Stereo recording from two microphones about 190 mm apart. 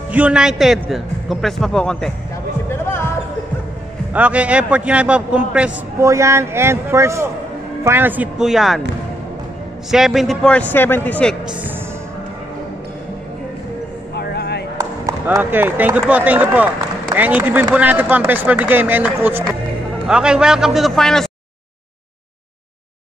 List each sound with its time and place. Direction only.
0.1 s a man's voice: 5° right (ahead or behind)
4.1 s a man's voice: 5° right (ahead or behind)
9.8 s a man's voice: centre (ahead or behind)
14.1 s a sound: 60° left (ahead or behind)
14.8 s a man's voice: 15° right (ahead or behind); by 21.3 s centre (ahead or behind)